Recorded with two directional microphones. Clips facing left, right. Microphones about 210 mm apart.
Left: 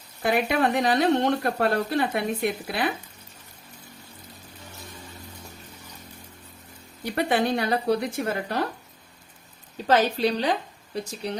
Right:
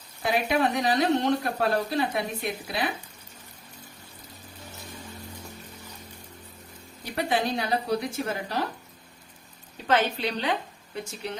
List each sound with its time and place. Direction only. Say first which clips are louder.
0.2 s a woman's voice: left 2 dB; 55° left (ahead or behind)
7.0 s a woman's voice: left 3 dB; 55° left (ahead or behind)
9.8 s a woman's voice: left 4 dB; 40° left (ahead or behind)